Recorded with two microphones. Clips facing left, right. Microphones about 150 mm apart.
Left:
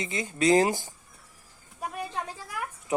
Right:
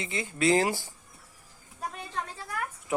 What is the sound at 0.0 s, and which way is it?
Speech, 20° left (ahead or behind).